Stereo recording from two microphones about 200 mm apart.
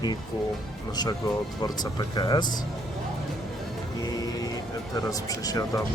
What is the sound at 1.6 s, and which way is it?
Speech, 20° left (ahead or behind).